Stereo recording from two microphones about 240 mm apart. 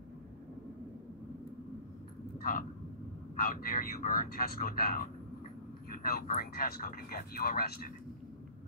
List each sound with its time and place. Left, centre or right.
3.3 s speech: left